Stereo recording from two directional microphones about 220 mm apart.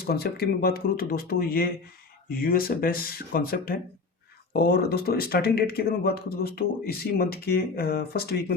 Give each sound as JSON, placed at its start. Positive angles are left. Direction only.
{"t": 0.0, "sound": "speech", "side_deg": 45}